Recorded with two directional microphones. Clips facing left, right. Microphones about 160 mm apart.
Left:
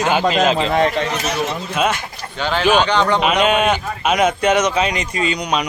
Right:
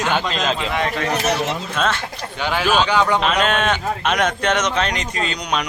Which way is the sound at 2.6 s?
10° left (ahead or behind).